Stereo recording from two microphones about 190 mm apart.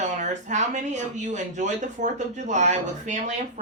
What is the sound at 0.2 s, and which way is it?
Speech, 40° right (ahead or behind).